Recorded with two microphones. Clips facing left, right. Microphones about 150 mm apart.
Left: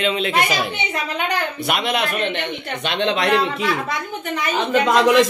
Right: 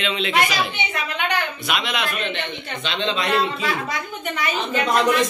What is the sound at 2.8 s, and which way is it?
Speech, 65° left (ahead or behind).